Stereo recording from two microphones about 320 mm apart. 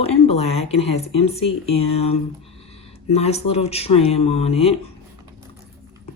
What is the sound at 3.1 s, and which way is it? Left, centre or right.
Speech, centre.